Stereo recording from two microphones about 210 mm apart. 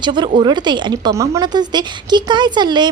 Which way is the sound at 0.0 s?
20° right (ahead or behind).